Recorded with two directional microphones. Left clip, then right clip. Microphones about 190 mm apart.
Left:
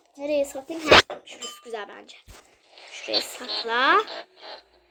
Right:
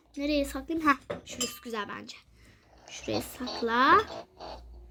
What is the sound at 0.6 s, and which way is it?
Speech, centre (ahead or behind).